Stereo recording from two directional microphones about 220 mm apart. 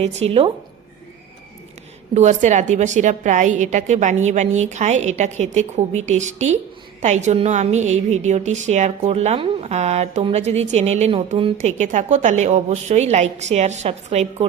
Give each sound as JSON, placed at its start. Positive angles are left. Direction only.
{"t": 0.0, "sound": "a woman's voice", "side_deg": -30}
{"t": 2.1, "sound": "a woman's voice", "side_deg": -30}